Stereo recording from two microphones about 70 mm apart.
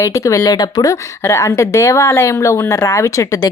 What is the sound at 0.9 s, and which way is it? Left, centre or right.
Speech, left.